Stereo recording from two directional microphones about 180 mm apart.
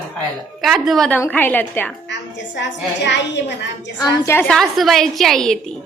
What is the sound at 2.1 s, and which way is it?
A woman's voice, 80° left.